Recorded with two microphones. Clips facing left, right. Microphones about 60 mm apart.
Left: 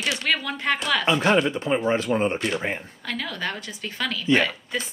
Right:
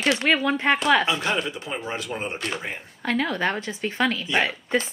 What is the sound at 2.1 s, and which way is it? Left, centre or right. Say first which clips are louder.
Speech: left 8 dB; left.